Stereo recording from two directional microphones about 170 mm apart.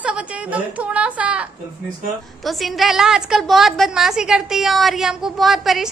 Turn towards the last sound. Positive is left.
turn(degrees=0)  # may be behind; listen again after turning